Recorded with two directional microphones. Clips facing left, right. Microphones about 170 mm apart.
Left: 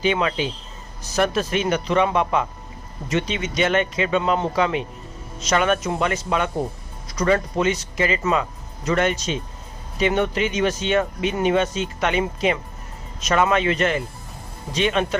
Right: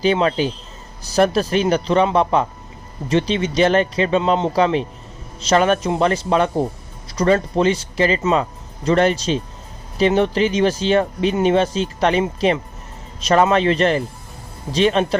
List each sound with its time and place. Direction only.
0.0 s speech: 35° right (ahead or behind)